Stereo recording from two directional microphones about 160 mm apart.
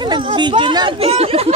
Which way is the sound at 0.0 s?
30° right (ahead or behind).